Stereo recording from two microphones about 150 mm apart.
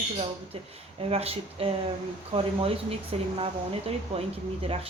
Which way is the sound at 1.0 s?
40° right (ahead or behind).